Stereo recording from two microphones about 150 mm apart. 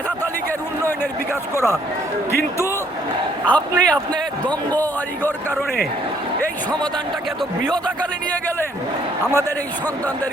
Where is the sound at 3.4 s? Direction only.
5° left (ahead or behind).